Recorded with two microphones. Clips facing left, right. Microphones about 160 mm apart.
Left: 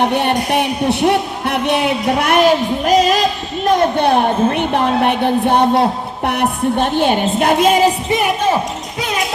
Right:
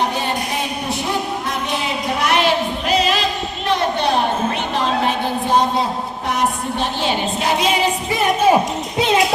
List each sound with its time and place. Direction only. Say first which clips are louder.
0.1 s a woman's voice: left 7 dB; 65° left (ahead or behind); by 7.9 s 50° left (ahead or behind)